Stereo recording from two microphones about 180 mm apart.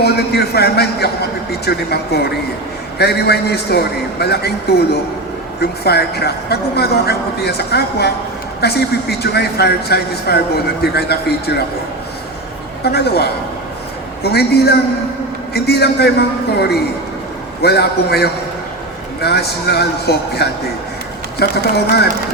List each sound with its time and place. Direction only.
0.0 s a woman's voice: 65° left (ahead or behind)
12.8 s a woman's voice: 65° left (ahead or behind)